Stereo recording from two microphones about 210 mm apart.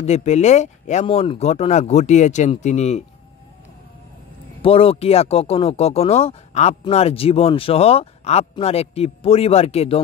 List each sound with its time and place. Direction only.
0.0 s speech: 30° left (ahead or behind)
4.6 s speech: 25° left (ahead or behind)